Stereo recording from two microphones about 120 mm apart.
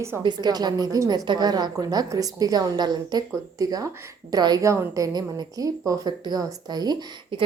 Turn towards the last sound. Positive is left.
turn(degrees=-45)  # may be behind; listen again after turning